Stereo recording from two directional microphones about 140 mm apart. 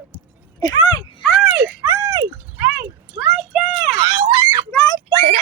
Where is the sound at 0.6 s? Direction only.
30° left (ahead or behind).